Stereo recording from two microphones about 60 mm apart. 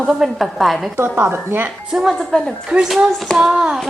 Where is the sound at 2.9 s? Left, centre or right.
Centre.